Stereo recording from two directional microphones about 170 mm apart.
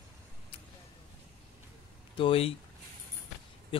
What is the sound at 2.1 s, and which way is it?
Speech, 30° left (ahead or behind).